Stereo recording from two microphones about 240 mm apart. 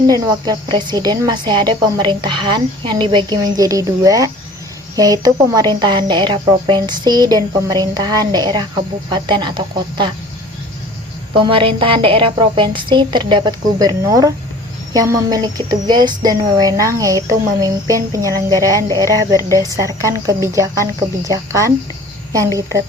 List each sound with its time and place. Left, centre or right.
0.1 s a woman's voice: centre
11.3 s a woman's voice: right